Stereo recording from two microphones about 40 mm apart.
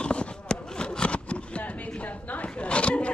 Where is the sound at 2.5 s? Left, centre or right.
Left.